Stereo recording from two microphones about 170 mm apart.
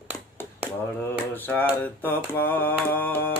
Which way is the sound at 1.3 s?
10° left (ahead or behind).